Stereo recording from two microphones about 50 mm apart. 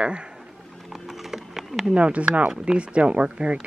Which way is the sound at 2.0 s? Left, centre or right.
Right.